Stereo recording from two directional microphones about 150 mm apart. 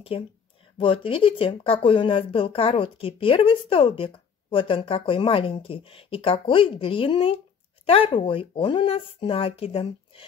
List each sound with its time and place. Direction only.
0.7 s speech: 35° left (ahead or behind)